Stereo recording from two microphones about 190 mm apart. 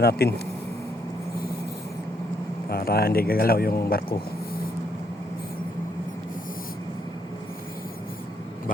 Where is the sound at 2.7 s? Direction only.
55° left (ahead or behind).